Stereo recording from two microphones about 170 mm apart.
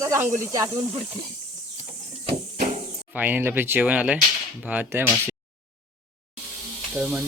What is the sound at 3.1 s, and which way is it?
Speech, 10° right (ahead or behind).